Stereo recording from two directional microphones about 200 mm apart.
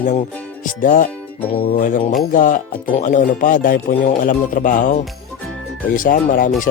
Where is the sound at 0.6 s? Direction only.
40° left (ahead or behind).